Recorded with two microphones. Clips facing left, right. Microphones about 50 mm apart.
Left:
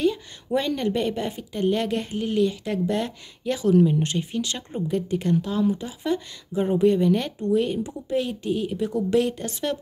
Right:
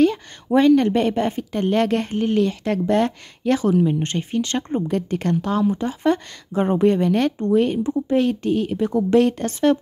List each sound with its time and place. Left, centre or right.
0.0 s speech: right